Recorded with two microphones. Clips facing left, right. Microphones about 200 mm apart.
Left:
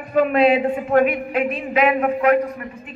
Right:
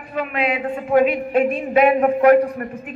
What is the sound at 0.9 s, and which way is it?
Speech, 10° right (ahead or behind).